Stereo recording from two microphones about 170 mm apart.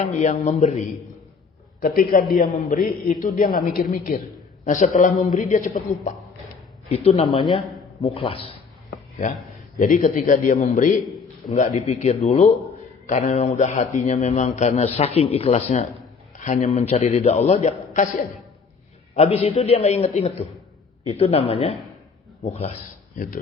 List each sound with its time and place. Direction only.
0.0 s a man's voice: 45° left (ahead or behind)
1.8 s a man's voice: 55° left (ahead or behind); by 8.4 s 30° left (ahead or behind)
9.7 s a man's voice: 55° left (ahead or behind)
21.1 s speech: 35° left (ahead or behind)
23.1 s speech: 55° left (ahead or behind)